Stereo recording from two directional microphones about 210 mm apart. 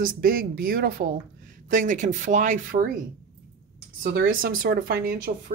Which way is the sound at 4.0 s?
45° right (ahead or behind).